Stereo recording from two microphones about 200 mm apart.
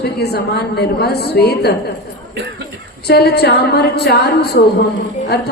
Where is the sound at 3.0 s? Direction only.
55° left (ahead or behind).